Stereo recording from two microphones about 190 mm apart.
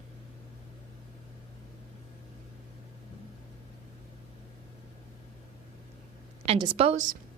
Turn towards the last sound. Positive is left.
turn(degrees=-40)  # may be behind; listen again after turning